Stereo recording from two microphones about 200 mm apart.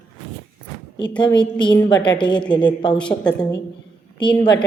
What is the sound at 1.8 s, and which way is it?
A woman's voice, 20° left (ahead or behind).